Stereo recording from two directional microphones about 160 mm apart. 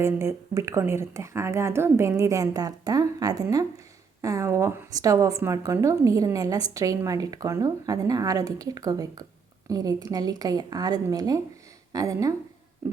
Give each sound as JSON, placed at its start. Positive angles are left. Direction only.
{"t": 0.0, "sound": "a woman's voice", "side_deg": -15}